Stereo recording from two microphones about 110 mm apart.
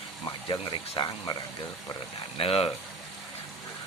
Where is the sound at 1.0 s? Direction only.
40° left (ahead or behind).